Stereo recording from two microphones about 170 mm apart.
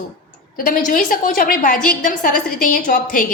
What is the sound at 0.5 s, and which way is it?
A woman's voice, 55° left (ahead or behind).